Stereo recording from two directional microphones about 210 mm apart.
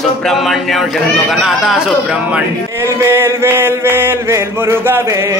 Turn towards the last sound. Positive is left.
turn(degrees=-15)  # may be behind; listen again after turning